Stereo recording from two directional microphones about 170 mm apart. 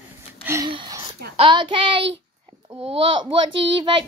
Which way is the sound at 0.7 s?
25° right (ahead or behind).